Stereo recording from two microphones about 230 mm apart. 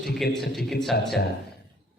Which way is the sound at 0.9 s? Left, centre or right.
Left.